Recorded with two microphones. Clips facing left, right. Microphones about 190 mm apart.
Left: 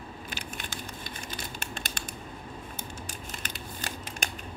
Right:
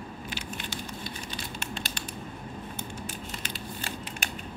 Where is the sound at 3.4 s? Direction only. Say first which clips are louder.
Right 2 dB; 40° left (ahead or behind).